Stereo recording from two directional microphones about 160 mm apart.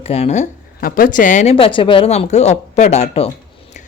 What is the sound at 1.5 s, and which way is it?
Speech, 35° left (ahead or behind).